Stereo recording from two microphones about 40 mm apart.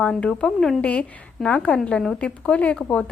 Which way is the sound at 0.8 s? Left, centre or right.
Left.